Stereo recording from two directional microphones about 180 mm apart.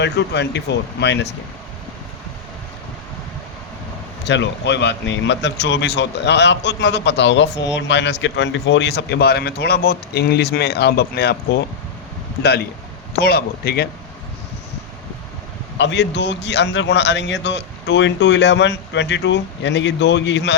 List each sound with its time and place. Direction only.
0.0 s a man's voice: 75° left (ahead or behind)
4.3 s a man's voice: 75° left (ahead or behind)
15.8 s a man's voice: 80° left